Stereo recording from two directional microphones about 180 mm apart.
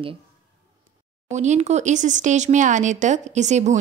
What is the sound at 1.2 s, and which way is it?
Speech, 40° right (ahead or behind).